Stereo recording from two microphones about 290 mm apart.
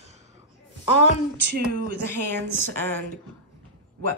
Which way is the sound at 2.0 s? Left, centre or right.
Centre.